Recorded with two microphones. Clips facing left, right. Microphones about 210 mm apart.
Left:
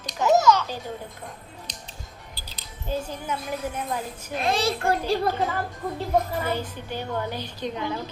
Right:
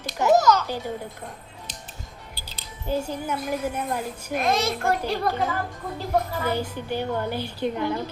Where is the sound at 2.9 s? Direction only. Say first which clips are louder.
Right 3 dB; 10° right (ahead or behind).